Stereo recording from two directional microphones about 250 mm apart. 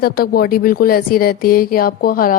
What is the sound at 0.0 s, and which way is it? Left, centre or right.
A woman's voice, left.